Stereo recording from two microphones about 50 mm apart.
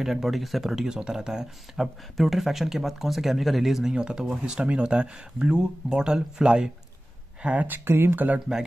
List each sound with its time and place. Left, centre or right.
0.0 s speech: centre
3.9 s speech: centre
7.6 s speech: right